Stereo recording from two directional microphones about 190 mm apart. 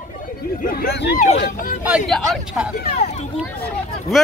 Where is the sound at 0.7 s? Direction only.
55° left (ahead or behind).